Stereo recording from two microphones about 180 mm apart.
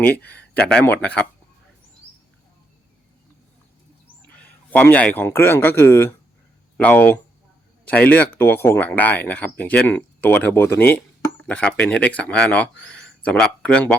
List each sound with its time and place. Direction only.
0.1 s speech: 60° left (ahead or behind)
0.4 s a sound: 60° left (ahead or behind)
0.9 s speech: 10° left (ahead or behind)
4.4 s a man's voice: 10° left (ahead or behind)